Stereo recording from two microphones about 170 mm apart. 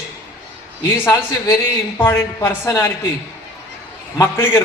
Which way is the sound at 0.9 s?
15° left (ahead or behind).